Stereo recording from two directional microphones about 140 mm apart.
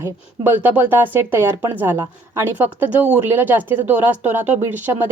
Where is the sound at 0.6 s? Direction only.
10° right (ahead or behind).